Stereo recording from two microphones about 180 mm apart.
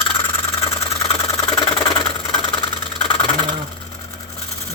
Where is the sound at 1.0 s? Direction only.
20° left (ahead or behind).